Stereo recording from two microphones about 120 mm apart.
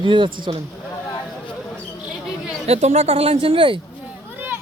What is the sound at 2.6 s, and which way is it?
Speech, 65° right (ahead or behind).